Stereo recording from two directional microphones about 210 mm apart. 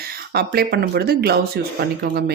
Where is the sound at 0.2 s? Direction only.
45° right (ahead or behind).